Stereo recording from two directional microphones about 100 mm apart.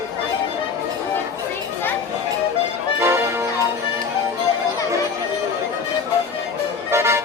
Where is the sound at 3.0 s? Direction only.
25° right (ahead or behind).